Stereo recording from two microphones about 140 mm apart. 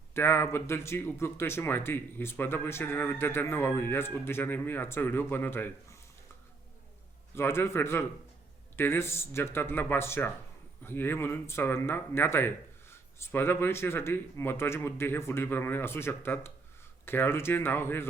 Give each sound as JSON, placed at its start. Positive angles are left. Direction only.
{"t": 0.1, "sound": "speech", "side_deg": 15}
{"t": 7.3, "sound": "speech", "side_deg": 20}